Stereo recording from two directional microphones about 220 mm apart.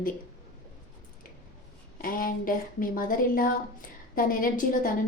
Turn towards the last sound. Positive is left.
turn(degrees=40)  # may be behind; listen again after turning